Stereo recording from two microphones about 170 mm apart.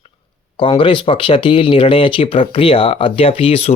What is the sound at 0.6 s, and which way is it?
Speech, 30° left (ahead or behind).